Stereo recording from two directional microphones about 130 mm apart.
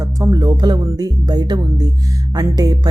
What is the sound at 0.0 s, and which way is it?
Speech, 25° right (ahead or behind).